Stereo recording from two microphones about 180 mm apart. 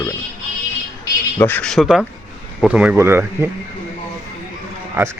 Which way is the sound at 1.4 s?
10° left (ahead or behind).